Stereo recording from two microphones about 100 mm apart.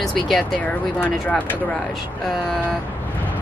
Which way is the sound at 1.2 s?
20° left (ahead or behind).